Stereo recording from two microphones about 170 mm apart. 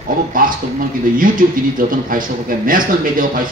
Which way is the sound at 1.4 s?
55° right (ahead or behind).